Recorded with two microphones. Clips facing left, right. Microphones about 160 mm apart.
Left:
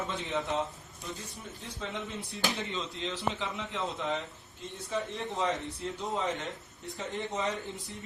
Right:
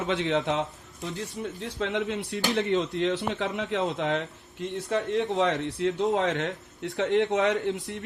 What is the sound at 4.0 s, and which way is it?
A man's voice, 75° right (ahead or behind).